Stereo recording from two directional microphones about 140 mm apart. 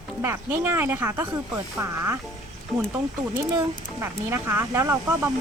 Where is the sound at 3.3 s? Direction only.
20° right (ahead or behind).